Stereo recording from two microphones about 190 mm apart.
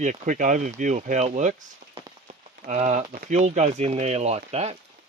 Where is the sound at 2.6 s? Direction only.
35° right (ahead or behind).